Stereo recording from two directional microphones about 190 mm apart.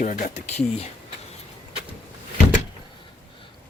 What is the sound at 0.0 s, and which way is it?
Speech, 40° left (ahead or behind).